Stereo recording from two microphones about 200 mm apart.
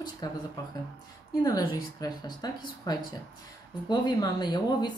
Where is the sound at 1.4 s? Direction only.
20° left (ahead or behind).